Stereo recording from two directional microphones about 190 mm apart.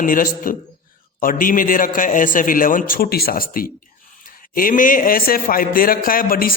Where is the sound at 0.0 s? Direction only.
45° left (ahead or behind).